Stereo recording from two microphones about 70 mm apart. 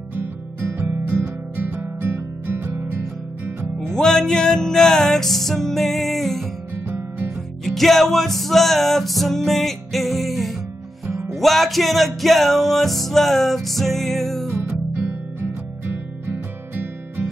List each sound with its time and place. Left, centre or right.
0.1 s music: right
3.9 s music: centre
7.6 s music: centre
16.7 s music: right